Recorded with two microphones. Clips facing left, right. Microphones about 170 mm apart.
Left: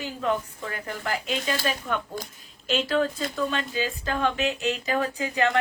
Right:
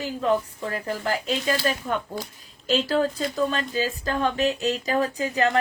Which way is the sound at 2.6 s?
35° right (ahead or behind).